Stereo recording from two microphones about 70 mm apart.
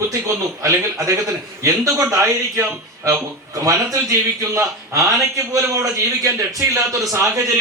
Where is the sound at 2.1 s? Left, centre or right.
Right.